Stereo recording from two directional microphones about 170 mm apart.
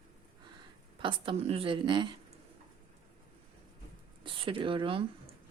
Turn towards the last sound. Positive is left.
turn(degrees=-30)  # may be behind; listen again after turning